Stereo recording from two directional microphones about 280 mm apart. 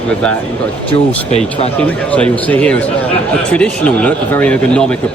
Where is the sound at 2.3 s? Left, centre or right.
Centre.